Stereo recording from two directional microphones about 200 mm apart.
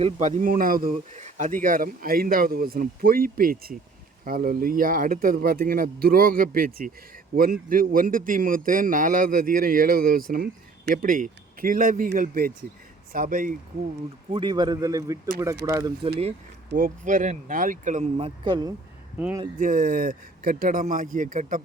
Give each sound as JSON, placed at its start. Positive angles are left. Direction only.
{"t": 0.0, "sound": "speech", "side_deg": -35}
{"t": 14.3, "sound": "a man's voice", "side_deg": -25}
{"t": 16.7, "sound": "speech", "side_deg": -45}
{"t": 18.4, "sound": "a man's voice", "side_deg": -20}
{"t": 19.5, "sound": "speech", "side_deg": -45}